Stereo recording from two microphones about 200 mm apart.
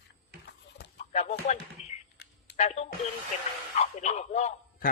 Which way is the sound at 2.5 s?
35° left (ahead or behind).